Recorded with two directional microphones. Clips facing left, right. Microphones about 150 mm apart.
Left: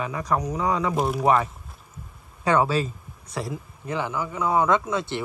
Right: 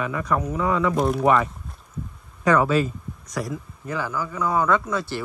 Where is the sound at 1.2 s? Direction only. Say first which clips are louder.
Right 1 dB; 30° left (ahead or behind).